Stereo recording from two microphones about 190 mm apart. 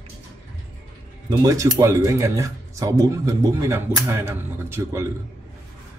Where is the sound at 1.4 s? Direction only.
20° right (ahead or behind).